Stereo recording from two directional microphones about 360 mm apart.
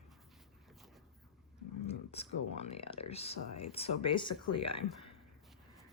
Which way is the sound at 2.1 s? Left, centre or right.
Centre.